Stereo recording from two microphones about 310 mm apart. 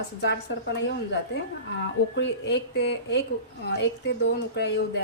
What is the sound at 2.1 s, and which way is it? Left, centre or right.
Speech, left.